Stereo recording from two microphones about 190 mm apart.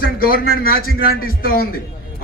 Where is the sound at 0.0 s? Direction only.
50° left (ahead or behind).